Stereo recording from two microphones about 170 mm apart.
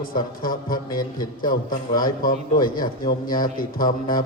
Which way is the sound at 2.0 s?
55° left (ahead or behind).